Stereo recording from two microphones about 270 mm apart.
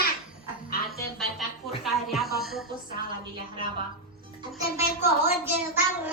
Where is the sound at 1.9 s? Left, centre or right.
Centre.